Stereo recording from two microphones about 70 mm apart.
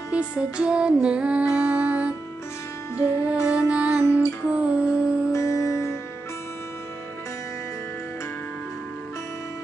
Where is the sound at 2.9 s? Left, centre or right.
Left.